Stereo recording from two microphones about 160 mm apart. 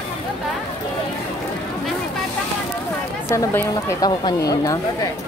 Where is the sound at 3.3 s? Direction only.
15° left (ahead or behind).